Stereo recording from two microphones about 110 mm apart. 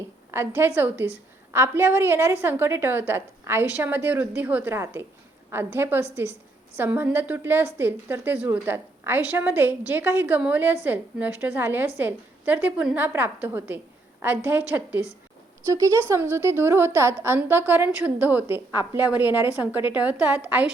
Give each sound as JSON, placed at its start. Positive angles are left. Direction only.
{"t": 0.3, "sound": "a woman's voice", "side_deg": -20}
{"t": 15.7, "sound": "a woman's voice", "side_deg": -30}